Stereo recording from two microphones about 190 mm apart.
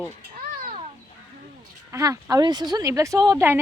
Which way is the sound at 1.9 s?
15° right (ahead or behind).